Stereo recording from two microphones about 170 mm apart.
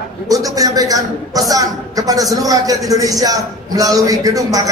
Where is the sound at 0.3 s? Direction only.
20° right (ahead or behind).